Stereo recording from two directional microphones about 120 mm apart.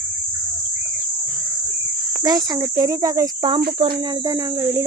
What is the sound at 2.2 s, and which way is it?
Speech, 35° right (ahead or behind).